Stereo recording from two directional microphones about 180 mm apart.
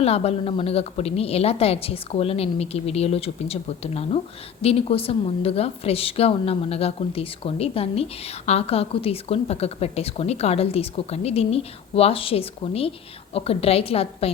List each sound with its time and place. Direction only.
0.0 s a woman's voice: 35° left (ahead or behind)